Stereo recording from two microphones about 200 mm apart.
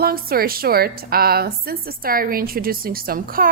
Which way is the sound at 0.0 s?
50° right (ahead or behind).